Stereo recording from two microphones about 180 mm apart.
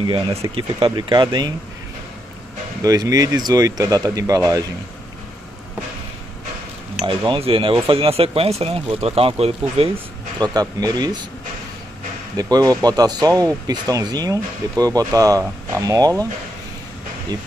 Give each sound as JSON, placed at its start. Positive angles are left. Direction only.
{"t": 0.0, "sound": "speech", "side_deg": -30}
{"t": 2.8, "sound": "speech", "side_deg": -20}
{"t": 7.1, "sound": "speech", "side_deg": -30}
{"t": 12.4, "sound": "speech", "side_deg": -20}
{"t": 17.3, "sound": "speech", "side_deg": -20}